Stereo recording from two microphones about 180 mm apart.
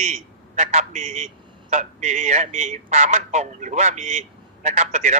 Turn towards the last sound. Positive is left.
turn(degrees=-40)  # may be behind; listen again after turning